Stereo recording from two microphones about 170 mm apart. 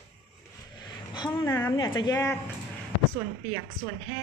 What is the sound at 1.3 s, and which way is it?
A woman's voice, 15° left (ahead or behind).